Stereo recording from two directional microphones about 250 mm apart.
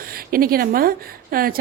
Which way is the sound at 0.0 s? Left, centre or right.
Right.